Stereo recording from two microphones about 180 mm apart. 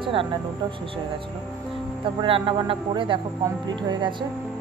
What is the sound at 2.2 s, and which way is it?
Speech, 30° right (ahead or behind).